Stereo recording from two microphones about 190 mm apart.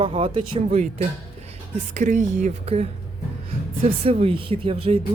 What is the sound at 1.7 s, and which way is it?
Speech, 40° right (ahead or behind).